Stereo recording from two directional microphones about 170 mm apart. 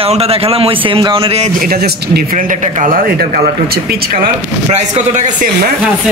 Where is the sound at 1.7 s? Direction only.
70° right (ahead or behind).